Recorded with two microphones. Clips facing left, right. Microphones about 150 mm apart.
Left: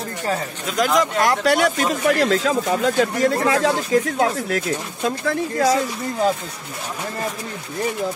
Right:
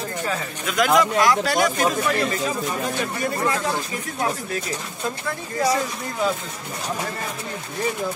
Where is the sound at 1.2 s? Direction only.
70° left (ahead or behind); by 5.7 s 90° left.